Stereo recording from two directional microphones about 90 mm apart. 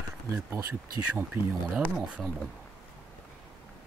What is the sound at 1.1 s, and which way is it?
Speech, 20° right (ahead or behind).